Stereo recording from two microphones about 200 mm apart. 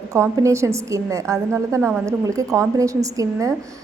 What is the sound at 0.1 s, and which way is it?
A woman's voice, 15° right (ahead or behind).